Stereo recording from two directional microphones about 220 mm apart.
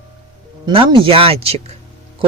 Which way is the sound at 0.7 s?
25° right (ahead or behind).